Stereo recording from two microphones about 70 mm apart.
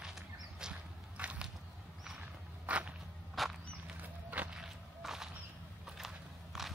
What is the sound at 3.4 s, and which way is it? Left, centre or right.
Mechanisms, centre.